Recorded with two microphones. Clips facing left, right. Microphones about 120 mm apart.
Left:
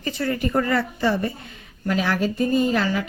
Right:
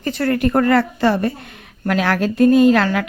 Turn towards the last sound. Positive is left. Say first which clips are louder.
# right 8 dB
turn(degrees=-75)  # may be behind; listen again after turning